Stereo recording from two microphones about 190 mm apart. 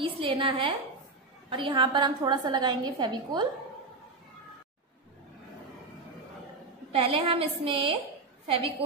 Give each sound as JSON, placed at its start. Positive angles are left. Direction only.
{"t": 0.0, "sound": "a woman's voice", "side_deg": -25}
{"t": 6.9, "sound": "a woman's voice", "side_deg": -30}